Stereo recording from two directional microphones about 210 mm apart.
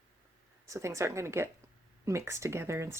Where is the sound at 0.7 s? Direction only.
15° right (ahead or behind).